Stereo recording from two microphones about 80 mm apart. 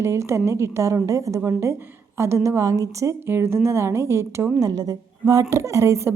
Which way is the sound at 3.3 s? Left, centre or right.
Right.